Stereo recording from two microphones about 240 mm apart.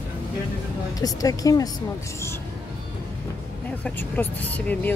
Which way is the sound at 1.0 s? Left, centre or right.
Centre.